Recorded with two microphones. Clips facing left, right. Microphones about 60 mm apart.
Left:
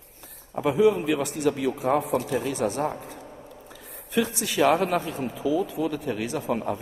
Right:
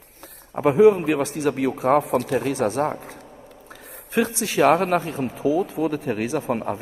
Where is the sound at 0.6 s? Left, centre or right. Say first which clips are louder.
Right 6 dB; right.